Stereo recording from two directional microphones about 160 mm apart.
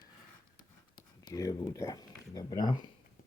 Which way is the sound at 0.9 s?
25° left (ahead or behind).